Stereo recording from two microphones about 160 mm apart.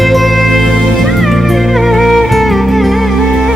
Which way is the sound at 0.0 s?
Centre (ahead or behind).